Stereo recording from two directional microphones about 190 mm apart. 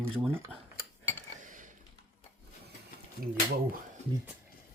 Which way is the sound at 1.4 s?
45° right (ahead or behind).